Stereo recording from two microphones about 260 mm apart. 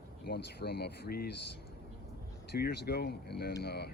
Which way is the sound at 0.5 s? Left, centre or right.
Left.